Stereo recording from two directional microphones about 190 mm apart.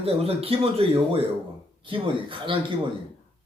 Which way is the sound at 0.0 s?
30° right (ahead or behind).